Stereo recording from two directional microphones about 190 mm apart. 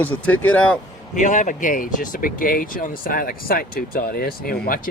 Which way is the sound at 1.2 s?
40° left (ahead or behind).